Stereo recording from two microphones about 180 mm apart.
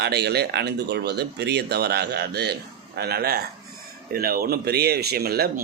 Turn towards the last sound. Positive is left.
turn(degrees=-60)  # may be behind; listen again after turning